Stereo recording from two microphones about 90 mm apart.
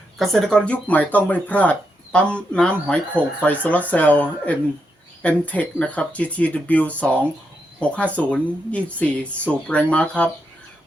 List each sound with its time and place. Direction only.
0.2 s speech: 5° left (ahead or behind)